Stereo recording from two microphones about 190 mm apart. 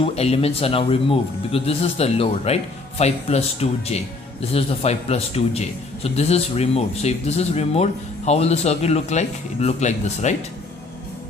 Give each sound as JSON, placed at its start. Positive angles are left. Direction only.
{"t": 0.0, "sound": "a man's voice", "side_deg": 30}